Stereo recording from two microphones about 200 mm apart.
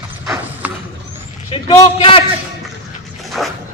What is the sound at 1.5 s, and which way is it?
Speech, 25° left (ahead or behind).